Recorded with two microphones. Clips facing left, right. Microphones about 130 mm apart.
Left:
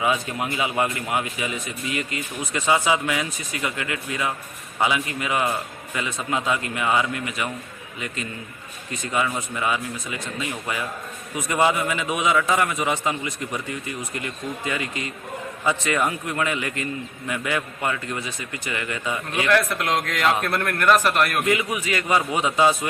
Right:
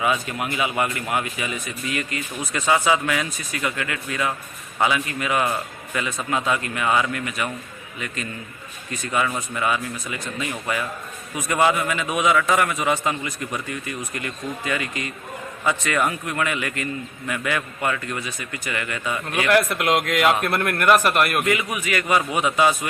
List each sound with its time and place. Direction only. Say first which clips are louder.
0.0 s speech: even; 20° left (ahead or behind)
19.5 s a man's voice: right 2 dB; 5° right (ahead or behind)
21.4 s speech: even; 25° left (ahead or behind)